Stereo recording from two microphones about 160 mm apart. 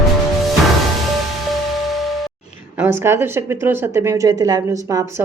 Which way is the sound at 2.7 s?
15° right (ahead or behind).